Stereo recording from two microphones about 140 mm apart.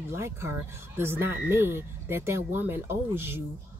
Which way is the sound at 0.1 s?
20° right (ahead or behind).